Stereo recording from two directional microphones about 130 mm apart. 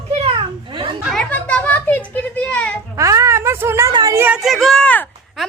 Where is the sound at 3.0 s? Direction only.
25° right (ahead or behind).